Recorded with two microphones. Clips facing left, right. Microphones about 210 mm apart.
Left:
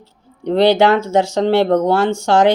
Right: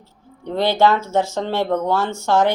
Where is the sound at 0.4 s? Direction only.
80° left.